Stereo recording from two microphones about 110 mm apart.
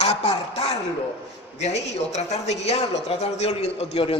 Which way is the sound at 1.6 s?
90° left.